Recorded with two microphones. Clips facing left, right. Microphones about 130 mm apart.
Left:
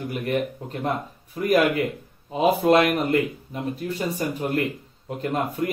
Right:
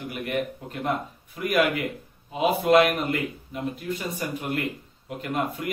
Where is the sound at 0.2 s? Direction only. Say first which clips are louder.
Left 2 dB; 35° left (ahead or behind).